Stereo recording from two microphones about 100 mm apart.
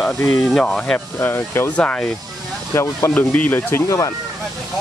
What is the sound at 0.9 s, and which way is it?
Speech, 20° left (ahead or behind).